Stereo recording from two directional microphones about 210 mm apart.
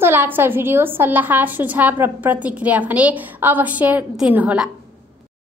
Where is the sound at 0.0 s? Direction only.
10° right (ahead or behind).